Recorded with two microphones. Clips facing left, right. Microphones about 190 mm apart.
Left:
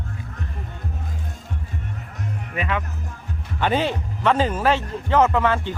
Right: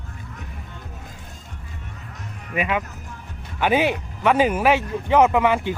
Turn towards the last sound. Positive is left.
turn(degrees=-15)  # may be behind; listen again after turning